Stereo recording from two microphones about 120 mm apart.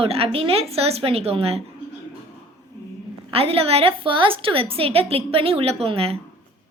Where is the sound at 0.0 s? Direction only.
55° right (ahead or behind).